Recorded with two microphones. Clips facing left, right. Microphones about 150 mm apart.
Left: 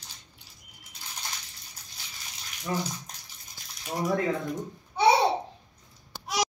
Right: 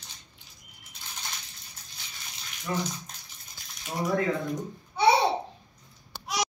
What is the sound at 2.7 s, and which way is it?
Speech, 20° left (ahead or behind).